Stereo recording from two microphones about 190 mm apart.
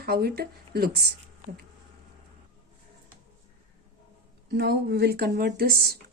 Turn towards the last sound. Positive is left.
turn(degrees=-55)  # may be behind; listen again after turning